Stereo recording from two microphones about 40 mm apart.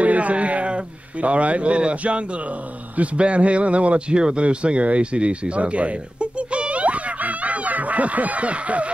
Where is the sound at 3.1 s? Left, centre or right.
Right.